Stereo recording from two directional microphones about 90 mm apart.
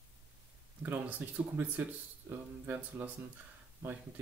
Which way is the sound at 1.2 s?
20° right (ahead or behind).